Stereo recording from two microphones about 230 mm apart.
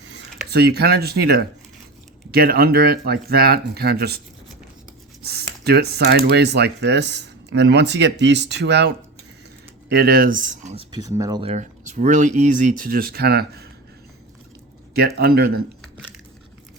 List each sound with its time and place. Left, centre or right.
0.7 s speech: right
5.2 s speech: right
9.9 s speech: right
10.9 s speech: centre
11.5 s speech: right
15.0 s speech: right